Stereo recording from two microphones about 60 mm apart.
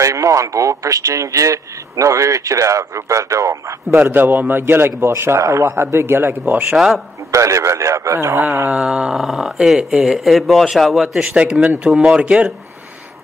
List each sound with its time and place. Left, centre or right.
0.0 s a man's voice: right
4.0 s a man's voice: right
5.4 s a man's voice: right
5.8 s a man's voice: right
6.7 s speech: centre
7.2 s a man's voice: right
8.6 s speech: centre
9.1 s a man's voice: centre
10.1 s a man's voice: centre
11.6 s speech: centre